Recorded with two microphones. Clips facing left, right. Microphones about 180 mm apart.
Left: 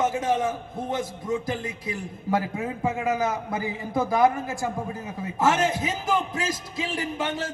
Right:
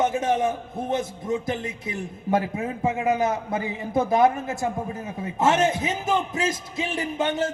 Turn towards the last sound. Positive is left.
turn(degrees=-25)  # may be behind; listen again after turning